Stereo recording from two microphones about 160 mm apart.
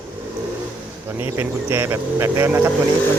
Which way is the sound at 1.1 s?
15° right (ahead or behind).